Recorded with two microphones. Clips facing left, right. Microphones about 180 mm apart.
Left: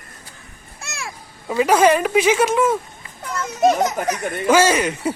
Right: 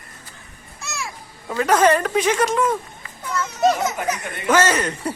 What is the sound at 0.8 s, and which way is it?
Children playing, 60° left (ahead or behind).